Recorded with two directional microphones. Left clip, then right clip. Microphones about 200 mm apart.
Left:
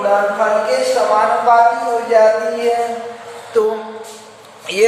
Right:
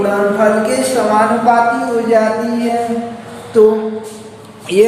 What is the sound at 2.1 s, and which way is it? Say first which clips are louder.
Speech: left 1 dB; 40° right (ahead or behind).